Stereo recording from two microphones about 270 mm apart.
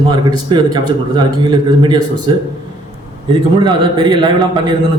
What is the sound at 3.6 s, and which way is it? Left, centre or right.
A man's voice, centre.